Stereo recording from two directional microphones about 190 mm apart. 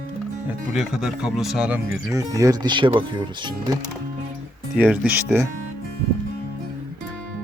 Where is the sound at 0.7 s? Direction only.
Centre (ahead or behind); by 3.5 s 25° right (ahead or behind).